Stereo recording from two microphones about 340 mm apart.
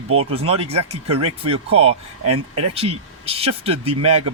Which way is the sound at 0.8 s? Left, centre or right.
Right.